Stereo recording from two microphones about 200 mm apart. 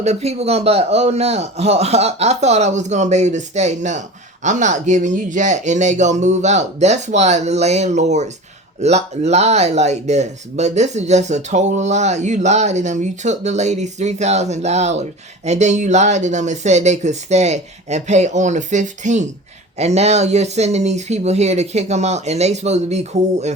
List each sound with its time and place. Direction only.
0.0 s speech: 35° right (ahead or behind)